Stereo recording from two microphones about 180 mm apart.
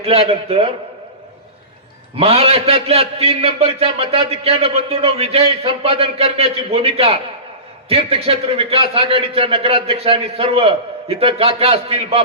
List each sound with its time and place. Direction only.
0.0 s a man's voice: 35° right (ahead or behind)
2.1 s a man's voice: 35° right (ahead or behind)